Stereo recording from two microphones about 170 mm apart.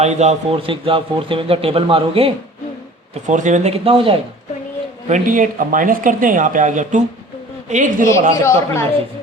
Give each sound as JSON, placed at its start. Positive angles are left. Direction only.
{"t": 0.0, "sound": "a man's voice", "side_deg": -40}
{"t": 3.2, "sound": "a man's voice", "side_deg": -45}
{"t": 5.0, "sound": "speech", "side_deg": -50}
{"t": 8.4, "sound": "speech", "side_deg": 15}